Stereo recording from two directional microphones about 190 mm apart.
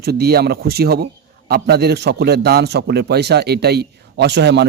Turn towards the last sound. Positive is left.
turn(degrees=-65)  # may be behind; listen again after turning